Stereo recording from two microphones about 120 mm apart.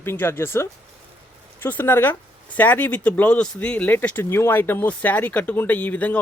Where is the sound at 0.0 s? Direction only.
20° left (ahead or behind).